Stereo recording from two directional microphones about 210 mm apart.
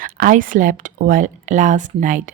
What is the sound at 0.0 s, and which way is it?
A woman's voice, 40° right (ahead or behind).